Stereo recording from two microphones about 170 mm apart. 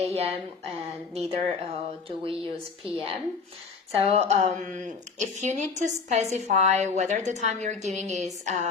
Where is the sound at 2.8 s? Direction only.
35° right (ahead or behind).